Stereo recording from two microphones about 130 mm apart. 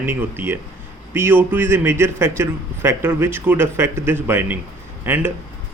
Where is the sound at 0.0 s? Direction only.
15° right (ahead or behind).